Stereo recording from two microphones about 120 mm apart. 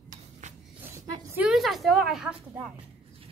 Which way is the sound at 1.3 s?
5° right (ahead or behind).